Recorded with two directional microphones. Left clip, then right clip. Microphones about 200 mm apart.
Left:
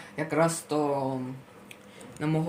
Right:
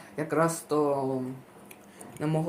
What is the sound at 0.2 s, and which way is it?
Speech, 5° left (ahead or behind).